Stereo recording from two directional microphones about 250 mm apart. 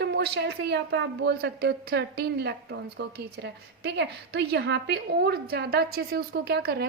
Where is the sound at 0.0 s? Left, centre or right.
Right.